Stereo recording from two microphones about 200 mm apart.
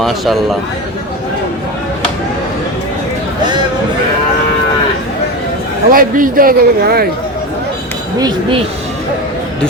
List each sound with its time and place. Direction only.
0.0 s a man's voice: centre (ahead or behind)
5.9 s a man's voice: 45° right (ahead or behind)
8.2 s speech: 25° right (ahead or behind)